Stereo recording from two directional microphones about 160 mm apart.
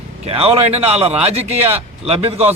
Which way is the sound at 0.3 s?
40° right (ahead or behind).